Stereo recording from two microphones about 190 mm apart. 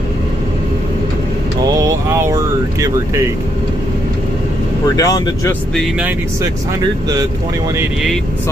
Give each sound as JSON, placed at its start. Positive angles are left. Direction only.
{"t": 1.8, "sound": "vehicle", "side_deg": -15}
{"t": 4.9, "sound": "speech", "side_deg": 20}
{"t": 5.8, "sound": "speech", "side_deg": -5}